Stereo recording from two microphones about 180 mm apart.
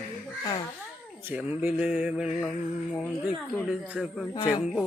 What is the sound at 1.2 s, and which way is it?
Speech, 10° right (ahead or behind).